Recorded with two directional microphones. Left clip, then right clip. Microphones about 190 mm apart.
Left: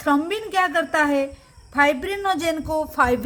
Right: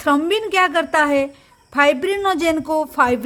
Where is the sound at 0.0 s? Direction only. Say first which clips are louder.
Right 4 dB; 35° right (ahead or behind).